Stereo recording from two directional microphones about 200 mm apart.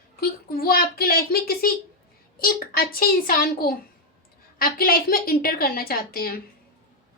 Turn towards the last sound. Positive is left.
turn(degrees=50)  # may be behind; listen again after turning